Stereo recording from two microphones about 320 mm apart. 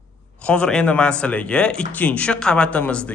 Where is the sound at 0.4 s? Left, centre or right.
Centre.